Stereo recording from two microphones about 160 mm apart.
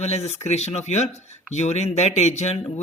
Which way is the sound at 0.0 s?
40° left (ahead or behind).